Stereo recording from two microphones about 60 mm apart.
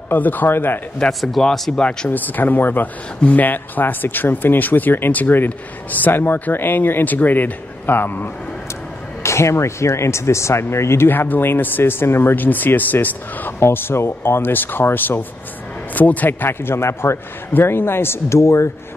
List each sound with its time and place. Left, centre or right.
0.1 s speech: left
1.2 s speech: centre
1.8 s speech: centre
2.0 s speech: left
9.2 s speech: left
11.1 s speech: left
13.6 s speech: left